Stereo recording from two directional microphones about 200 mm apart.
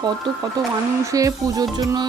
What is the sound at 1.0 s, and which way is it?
Music, 15° right (ahead or behind).